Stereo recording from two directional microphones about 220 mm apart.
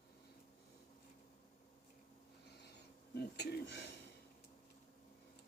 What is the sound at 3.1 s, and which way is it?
Speech, 50° left (ahead or behind).